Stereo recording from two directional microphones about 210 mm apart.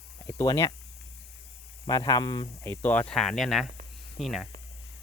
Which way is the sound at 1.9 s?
20° left (ahead or behind).